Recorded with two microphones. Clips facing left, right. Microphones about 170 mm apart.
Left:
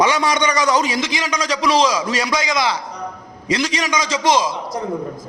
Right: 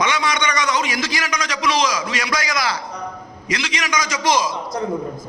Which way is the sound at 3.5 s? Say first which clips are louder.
Left 4 dB; 35° left (ahead or behind).